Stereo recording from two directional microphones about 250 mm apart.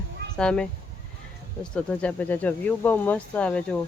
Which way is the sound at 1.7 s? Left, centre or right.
Centre.